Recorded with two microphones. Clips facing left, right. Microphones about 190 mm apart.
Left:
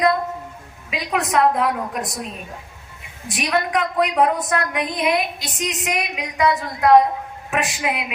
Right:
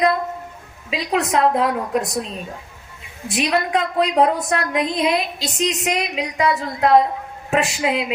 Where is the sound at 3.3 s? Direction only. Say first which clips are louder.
Right 2 dB; 25° right (ahead or behind).